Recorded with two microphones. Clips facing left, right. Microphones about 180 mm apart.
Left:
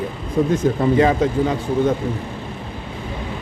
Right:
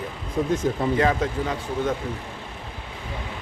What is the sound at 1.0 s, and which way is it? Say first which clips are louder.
Speech: left 7 dB; 25° left (ahead or behind).